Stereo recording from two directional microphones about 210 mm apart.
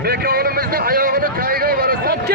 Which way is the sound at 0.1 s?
45° right (ahead or behind).